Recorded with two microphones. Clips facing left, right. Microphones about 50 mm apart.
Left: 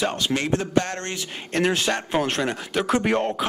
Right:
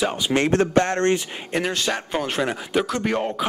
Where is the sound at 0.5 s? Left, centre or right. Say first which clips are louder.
Right 5 dB; right.